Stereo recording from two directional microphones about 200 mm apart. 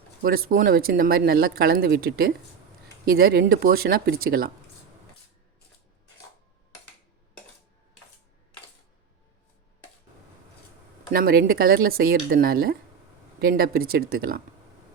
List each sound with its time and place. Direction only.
0.2 s speech: 50° right (ahead or behind)
11.1 s speech: 50° right (ahead or behind)